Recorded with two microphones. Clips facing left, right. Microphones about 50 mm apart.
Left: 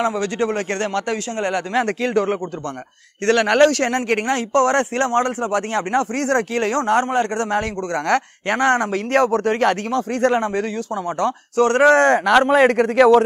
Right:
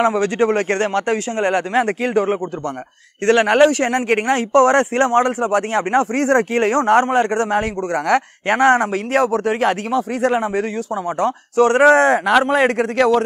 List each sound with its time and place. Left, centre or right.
0.0 s speech: right
9.1 s speech: centre
11.1 s speech: right
11.8 s a man's voice: centre